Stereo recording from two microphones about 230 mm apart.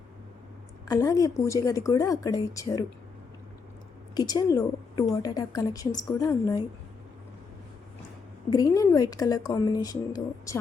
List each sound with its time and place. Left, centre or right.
0.9 s speech: centre
4.1 s a woman's voice: centre
8.4 s speech: centre